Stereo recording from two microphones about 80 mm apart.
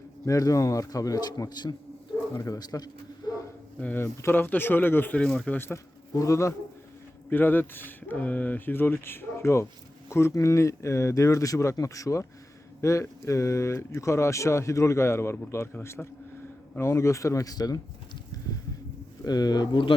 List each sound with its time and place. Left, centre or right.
0.3 s speech: left
3.8 s speech: centre
4.0 s speech: left
5.2 s speech: centre
5.7 s speech: left
7.3 s speech: left
19.2 s speech: left